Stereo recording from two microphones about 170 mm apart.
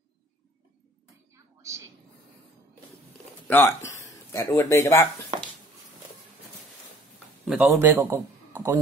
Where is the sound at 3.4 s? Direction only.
10° left (ahead or behind).